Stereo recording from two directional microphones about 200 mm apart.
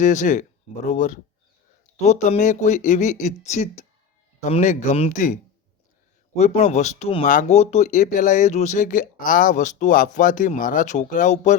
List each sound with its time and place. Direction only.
0.0 s speech: 40° left (ahead or behind)